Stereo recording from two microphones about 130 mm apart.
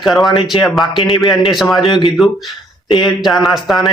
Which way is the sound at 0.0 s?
Centre (ahead or behind).